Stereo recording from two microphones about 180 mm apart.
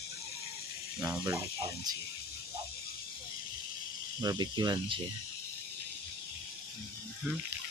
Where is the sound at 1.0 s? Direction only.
15° right (ahead or behind).